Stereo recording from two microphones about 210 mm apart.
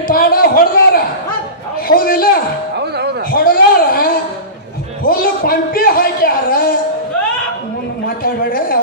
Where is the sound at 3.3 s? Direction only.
45° left (ahead or behind).